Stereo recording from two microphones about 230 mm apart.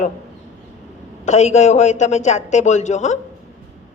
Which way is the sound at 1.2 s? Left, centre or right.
Left.